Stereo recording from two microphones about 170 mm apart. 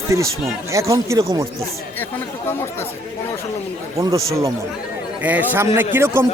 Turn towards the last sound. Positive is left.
turn(degrees=-15)  # may be behind; listen again after turning